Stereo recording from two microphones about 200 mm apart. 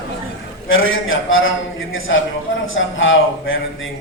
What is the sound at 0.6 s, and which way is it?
A man's voice, 80° left.